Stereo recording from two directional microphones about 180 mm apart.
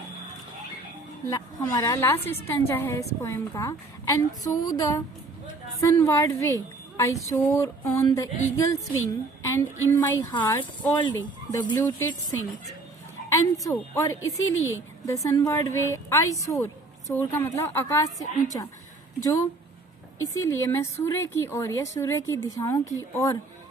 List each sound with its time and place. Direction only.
1.3 s a woman's voice: 20° left (ahead or behind)
13.3 s a woman's voice: 15° left (ahead or behind)